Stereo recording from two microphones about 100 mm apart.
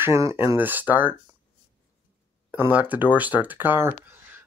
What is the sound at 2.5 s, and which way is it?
Speech, 15° right (ahead or behind).